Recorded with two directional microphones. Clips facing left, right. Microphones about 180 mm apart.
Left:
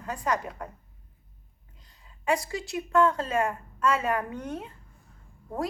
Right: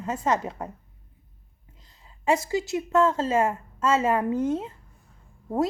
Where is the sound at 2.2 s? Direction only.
25° right (ahead or behind).